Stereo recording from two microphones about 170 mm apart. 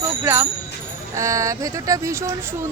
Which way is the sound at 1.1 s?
20° right (ahead or behind).